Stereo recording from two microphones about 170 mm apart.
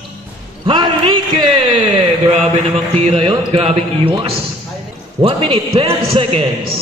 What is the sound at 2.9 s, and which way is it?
A man's voice, 35° right (ahead or behind).